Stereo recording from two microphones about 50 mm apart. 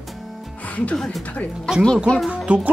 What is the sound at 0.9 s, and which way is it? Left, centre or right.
Speech, centre.